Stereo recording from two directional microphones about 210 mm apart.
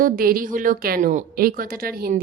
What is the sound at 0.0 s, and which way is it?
A woman's voice, 45° right (ahead or behind).